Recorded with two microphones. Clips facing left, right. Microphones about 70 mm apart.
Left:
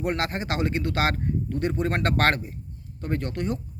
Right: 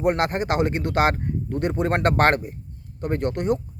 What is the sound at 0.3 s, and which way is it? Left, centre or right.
Speech, right.